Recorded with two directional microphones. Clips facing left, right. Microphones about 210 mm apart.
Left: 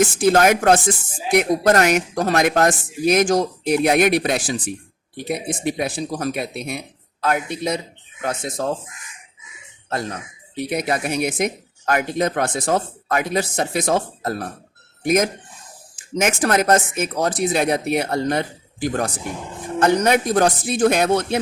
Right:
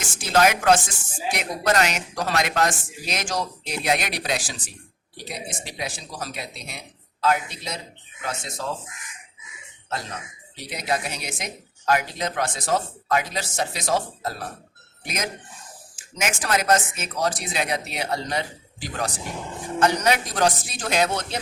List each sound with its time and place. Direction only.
0.0 s speech: 55° left (ahead or behind)
10.5 s speech: 55° left (ahead or behind)